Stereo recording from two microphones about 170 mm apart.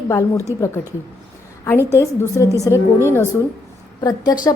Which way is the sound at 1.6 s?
15° left (ahead or behind).